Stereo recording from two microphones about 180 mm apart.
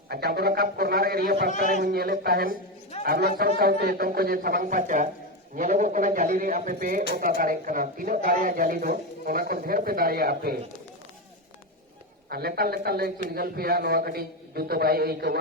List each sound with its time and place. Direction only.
0.1 s a man's voice: 60° right (ahead or behind)
1.5 s a man's voice: 45° left (ahead or behind)
1.8 s a man's voice: 60° right (ahead or behind)
12.3 s a man's voice: 55° right (ahead or behind)